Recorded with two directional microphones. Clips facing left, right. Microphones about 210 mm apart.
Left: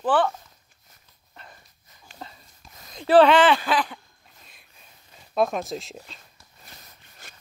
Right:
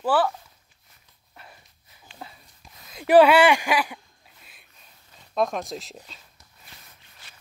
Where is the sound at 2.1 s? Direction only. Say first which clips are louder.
Left 1 dB; 40° left (ahead or behind).